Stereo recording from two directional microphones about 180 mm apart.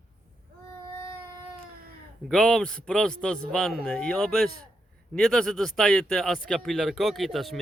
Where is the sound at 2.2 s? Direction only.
Centre (ahead or behind).